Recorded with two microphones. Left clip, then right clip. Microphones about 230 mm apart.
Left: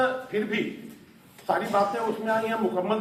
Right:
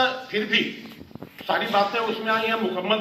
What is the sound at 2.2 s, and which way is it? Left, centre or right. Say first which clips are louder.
Speech: right 2 dB; left.